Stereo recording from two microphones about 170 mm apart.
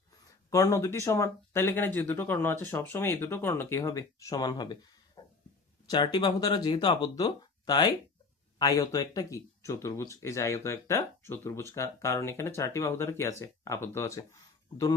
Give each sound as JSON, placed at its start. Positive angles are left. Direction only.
{"t": 0.3, "sound": "speech", "side_deg": 20}